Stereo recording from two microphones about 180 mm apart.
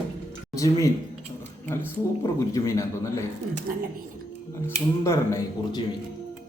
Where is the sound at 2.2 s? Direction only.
20° left (ahead or behind).